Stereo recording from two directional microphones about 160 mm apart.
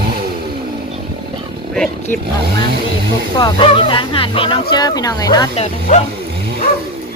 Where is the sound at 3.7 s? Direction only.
35° left (ahead or behind).